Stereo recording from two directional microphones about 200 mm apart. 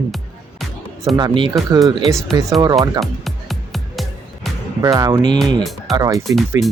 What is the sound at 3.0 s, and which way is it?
Music, centre (ahead or behind).